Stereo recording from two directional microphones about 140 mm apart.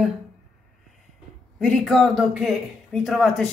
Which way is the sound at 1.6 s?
Centre (ahead or behind).